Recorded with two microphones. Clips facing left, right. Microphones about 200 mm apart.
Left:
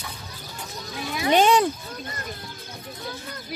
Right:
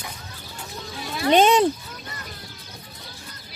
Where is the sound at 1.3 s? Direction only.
20° right (ahead or behind).